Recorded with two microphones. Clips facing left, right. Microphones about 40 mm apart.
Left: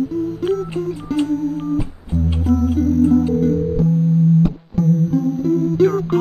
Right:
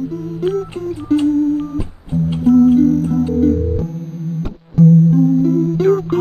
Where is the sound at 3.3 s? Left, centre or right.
Right.